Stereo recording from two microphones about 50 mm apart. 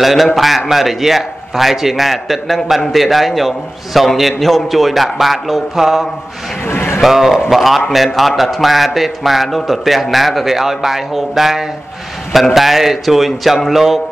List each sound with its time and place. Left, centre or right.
0.0 s a man's voice: centre
6.7 s a sound: left
7.0 s a man's voice: centre